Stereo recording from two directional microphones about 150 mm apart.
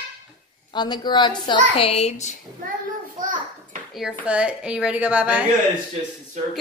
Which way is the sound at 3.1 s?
60° right (ahead or behind).